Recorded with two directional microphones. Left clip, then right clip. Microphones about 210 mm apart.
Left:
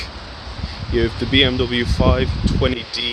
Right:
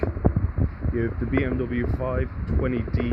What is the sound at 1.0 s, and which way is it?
Speech, 15° left (ahead or behind).